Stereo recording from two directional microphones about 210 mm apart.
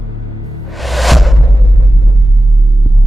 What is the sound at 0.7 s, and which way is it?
Music, centre (ahead or behind).